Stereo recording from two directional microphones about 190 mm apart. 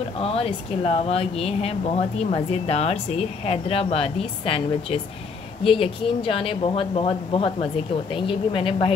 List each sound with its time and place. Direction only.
0.2 s speech: 30° left (ahead or behind)